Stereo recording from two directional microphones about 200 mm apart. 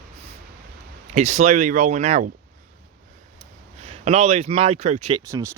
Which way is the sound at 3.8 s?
35° right (ahead or behind).